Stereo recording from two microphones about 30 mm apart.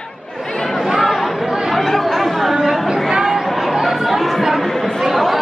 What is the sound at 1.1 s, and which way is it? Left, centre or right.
Chatter, centre.